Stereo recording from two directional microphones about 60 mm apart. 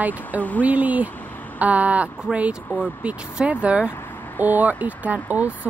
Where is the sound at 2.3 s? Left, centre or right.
Centre.